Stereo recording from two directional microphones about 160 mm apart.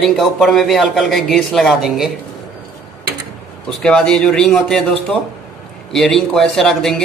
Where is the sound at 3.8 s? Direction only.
5° left (ahead or behind).